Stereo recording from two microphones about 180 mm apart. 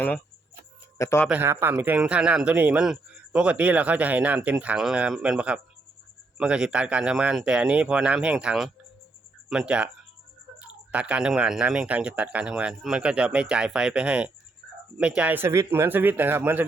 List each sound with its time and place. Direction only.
0.9 s a man's voice: 15° left (ahead or behind)
1.3 s speech: 10° right (ahead or behind)